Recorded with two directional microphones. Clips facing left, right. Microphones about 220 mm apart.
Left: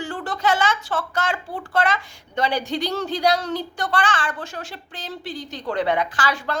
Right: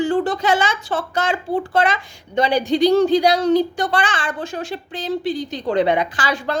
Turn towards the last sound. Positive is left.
turn(degrees=-15)  # may be behind; listen again after turning